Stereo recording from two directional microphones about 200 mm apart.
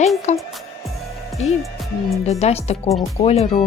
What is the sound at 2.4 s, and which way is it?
Speech, 30° left (ahead or behind).